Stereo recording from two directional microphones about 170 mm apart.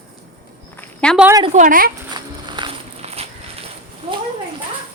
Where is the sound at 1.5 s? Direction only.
50° right (ahead or behind).